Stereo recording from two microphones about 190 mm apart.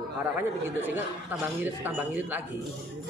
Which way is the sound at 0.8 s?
10° right (ahead or behind).